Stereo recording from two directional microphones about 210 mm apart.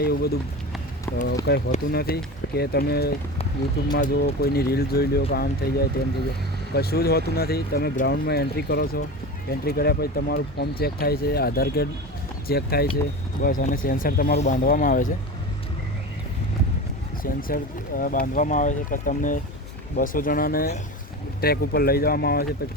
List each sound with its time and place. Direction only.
0.0 s speech: 50° left (ahead or behind)
1.7 s speech: 45° left (ahead or behind)
17.2 s speech: 40° left (ahead or behind)